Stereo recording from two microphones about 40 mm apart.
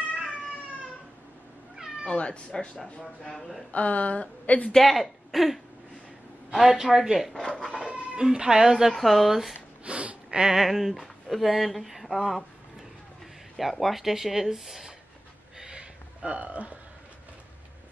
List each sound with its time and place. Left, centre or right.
2.0 s speech: left
3.7 s a woman's voice: left
4.7 s a woman's voice: centre
7.5 s cat: centre
8.2 s a woman's voice: centre
8.9 s speech: centre
9.8 s a sound: right
10.4 s speech: centre
13.6 s speech: centre
15.5 s a sound: centre; by 16.7 s right